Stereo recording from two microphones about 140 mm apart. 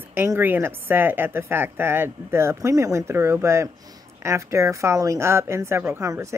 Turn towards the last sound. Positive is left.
turn(degrees=-20)  # may be behind; listen again after turning